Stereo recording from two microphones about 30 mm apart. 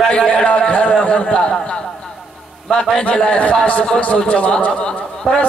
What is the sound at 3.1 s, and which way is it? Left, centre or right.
Speech, left.